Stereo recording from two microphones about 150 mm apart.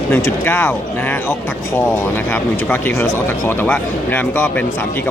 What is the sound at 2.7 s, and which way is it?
Speech, 15° left (ahead or behind).